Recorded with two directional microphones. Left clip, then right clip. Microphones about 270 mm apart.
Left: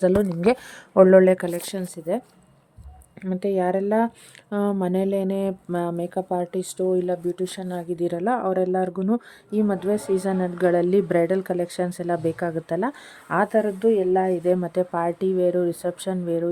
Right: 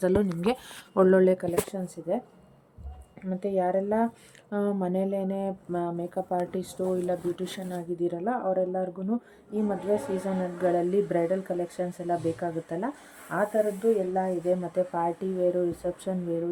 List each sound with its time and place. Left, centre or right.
0.0 s speech: centre
1.4 s speech: left